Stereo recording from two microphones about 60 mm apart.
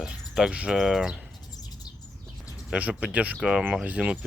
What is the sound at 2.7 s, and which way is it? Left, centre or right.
Speech, right.